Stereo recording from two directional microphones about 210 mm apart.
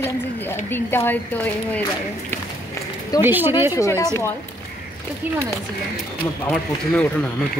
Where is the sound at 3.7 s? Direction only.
15° left (ahead or behind).